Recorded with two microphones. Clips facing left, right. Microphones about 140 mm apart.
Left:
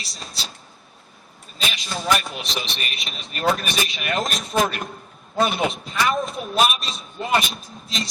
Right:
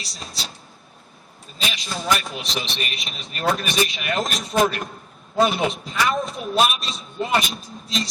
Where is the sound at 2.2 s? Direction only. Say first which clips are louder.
Right 1 dB; centre (ahead or behind).